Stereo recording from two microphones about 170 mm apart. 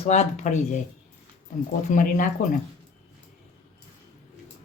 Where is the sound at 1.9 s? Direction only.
50° left (ahead or behind).